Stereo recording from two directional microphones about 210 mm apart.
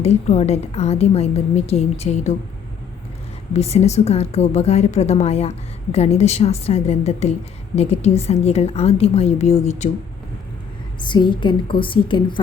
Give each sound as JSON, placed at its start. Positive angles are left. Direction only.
{"t": 0.0, "sound": "a woman's voice", "side_deg": 30}
{"t": 3.5, "sound": "a woman's voice", "side_deg": 30}
{"t": 11.0, "sound": "a woman's voice", "side_deg": 20}